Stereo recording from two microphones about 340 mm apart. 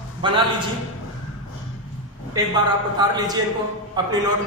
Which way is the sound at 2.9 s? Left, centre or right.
Centre.